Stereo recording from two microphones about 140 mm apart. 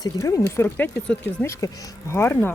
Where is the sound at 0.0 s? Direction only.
25° left (ahead or behind).